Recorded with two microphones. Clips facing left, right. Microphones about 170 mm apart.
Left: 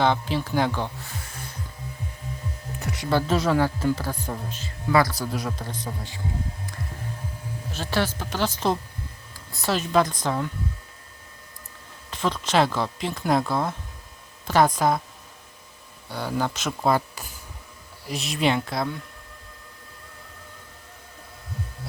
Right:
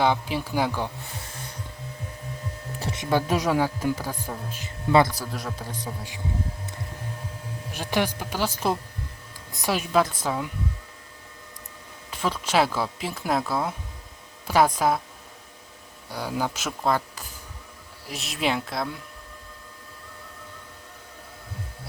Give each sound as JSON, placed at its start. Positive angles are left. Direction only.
{"t": 0.0, "sound": "speech", "side_deg": -10}
{"t": 2.7, "sound": "music", "side_deg": -25}
{"t": 3.1, "sound": "speech", "side_deg": -15}
{"t": 4.6, "sound": "speech", "side_deg": -25}
{"t": 5.1, "sound": "speech", "side_deg": 0}
{"t": 5.6, "sound": "speech", "side_deg": -10}
{"t": 7.7, "sound": "speech", "side_deg": -15}
{"t": 12.1, "sound": "speech", "side_deg": -5}
{"t": 16.1, "sound": "speech", "side_deg": -5}
{"t": 16.8, "sound": "speech", "side_deg": 10}